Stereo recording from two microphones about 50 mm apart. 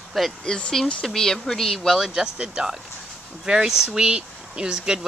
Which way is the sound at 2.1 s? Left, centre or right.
Centre.